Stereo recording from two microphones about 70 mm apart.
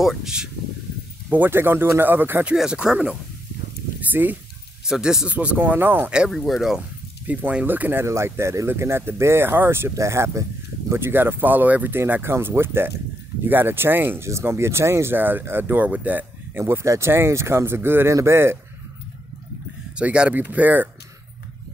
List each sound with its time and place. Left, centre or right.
0.0 s speech: centre
1.3 s speech: right
2.5 s speech: centre
4.1 s speech: right
4.8 s speech: centre; by 6.1 s right
6.3 s speech: centre
7.2 s speech: right
8.0 s speech: right
16.6 s speech: right
20.0 s speech: centre